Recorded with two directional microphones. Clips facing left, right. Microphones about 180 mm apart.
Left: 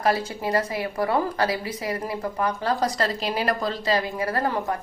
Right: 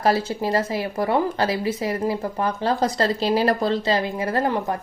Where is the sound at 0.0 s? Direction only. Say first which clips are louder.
Right 3 dB; 30° right (ahead or behind).